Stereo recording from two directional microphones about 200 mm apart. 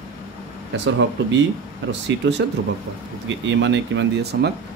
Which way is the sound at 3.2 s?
65° right (ahead or behind).